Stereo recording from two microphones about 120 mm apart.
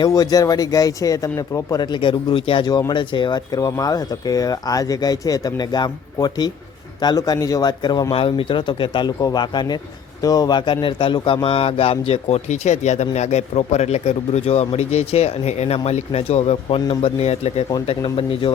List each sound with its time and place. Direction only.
0.0 s speech: 30° left (ahead or behind)
2.6 s speech: 35° left (ahead or behind)
8.1 s speech: 50° left (ahead or behind)
18.0 s speech: 50° left (ahead or behind)